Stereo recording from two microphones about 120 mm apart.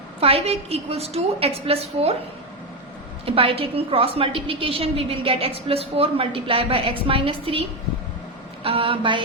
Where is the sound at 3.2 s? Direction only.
50° right (ahead or behind).